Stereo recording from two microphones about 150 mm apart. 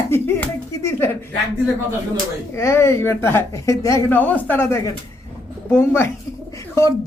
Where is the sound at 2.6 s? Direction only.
20° left (ahead or behind).